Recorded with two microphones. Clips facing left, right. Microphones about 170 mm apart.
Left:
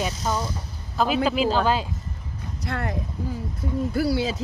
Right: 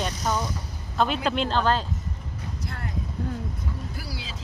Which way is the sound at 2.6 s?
75° left (ahead or behind).